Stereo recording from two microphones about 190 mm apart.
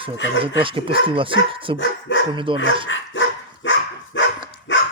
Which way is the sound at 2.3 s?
25° right (ahead or behind).